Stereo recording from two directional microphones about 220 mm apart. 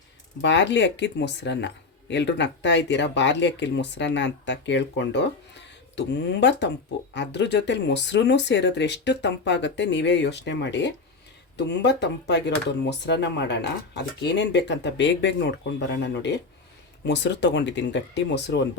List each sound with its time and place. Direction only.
0.4 s speech: 55° left (ahead or behind)